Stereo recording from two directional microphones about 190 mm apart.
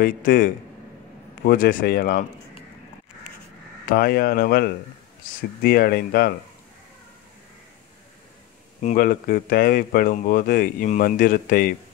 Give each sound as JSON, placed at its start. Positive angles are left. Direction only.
{"t": 0.0, "sound": "speech", "side_deg": 50}
{"t": 3.9, "sound": "speech", "side_deg": 55}
{"t": 8.8, "sound": "speech", "side_deg": 45}